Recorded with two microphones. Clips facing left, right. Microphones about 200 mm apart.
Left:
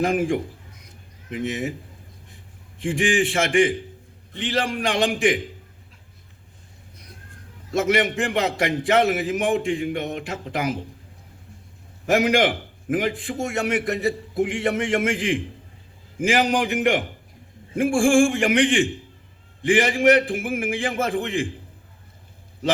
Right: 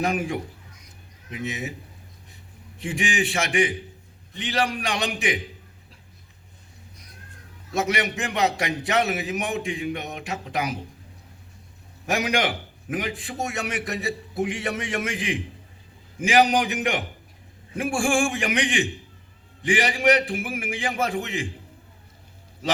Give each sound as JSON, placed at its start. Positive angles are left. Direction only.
{"t": 0.0, "sound": "a man's voice", "side_deg": 50}
{"t": 1.5, "sound": "a man's voice", "side_deg": 50}
{"t": 2.8, "sound": "a man's voice", "side_deg": 50}
{"t": 7.8, "sound": "a man's voice", "side_deg": 50}
{"t": 12.1, "sound": "a man's voice", "side_deg": 50}
{"t": 16.6, "sound": "a man's voice", "side_deg": 55}